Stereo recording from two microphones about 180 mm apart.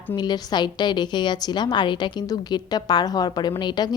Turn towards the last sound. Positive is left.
turn(degrees=25)  # may be behind; listen again after turning